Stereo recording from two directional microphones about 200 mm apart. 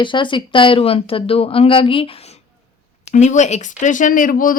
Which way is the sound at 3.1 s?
35° left (ahead or behind).